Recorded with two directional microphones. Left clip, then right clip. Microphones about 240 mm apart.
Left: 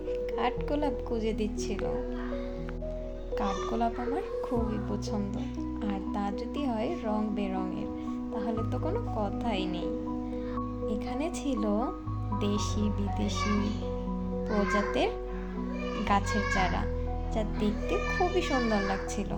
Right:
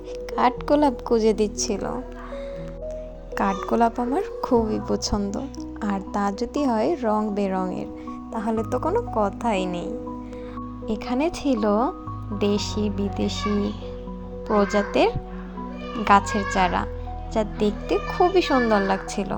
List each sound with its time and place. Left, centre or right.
0.3 s speech: right
3.3 s speech: right
14.4 s speech: right